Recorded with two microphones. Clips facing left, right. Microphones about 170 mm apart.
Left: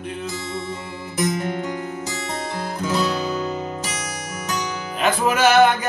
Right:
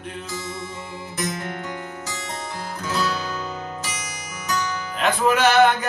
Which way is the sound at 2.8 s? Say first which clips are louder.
Left 3 dB; 15° left (ahead or behind).